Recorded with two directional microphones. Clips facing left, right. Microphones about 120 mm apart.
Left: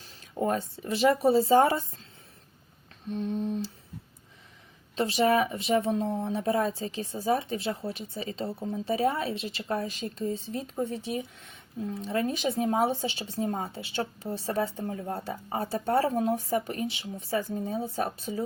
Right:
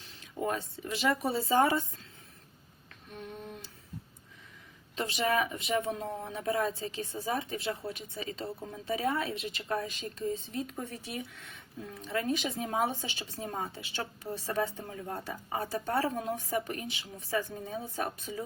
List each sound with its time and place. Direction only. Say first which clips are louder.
0.1 s speech: left 5 dB; 40° left (ahead or behind)
1.1 s speech: left 7 dB; 30° left (ahead or behind)
3.1 s a sound: left 13 dB; 25° left (ahead or behind)
4.9 s speech: left 6 dB; 35° left (ahead or behind)